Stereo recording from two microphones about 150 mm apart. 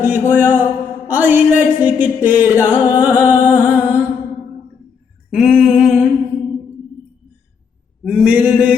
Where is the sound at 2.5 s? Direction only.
20° left (ahead or behind).